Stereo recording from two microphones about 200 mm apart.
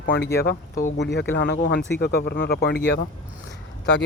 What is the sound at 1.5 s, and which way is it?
Speech, 50° left (ahead or behind).